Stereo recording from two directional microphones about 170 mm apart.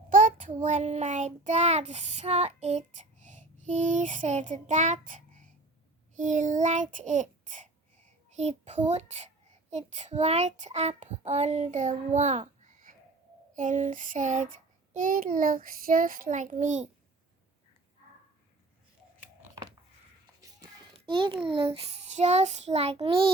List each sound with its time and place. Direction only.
0.1 s child singing: 50° right (ahead or behind)
8.4 s a child's voice: 40° right (ahead or behind)
13.5 s child singing: 50° right (ahead or behind)
14.9 s a child's voice: 55° right (ahead or behind)
20.9 s a sound: 30° right (ahead or behind)
21.4 s child singing: 35° right (ahead or behind)